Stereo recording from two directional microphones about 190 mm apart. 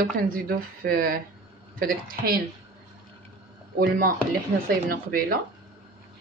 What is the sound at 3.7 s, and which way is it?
A woman's voice, 50° right (ahead or behind).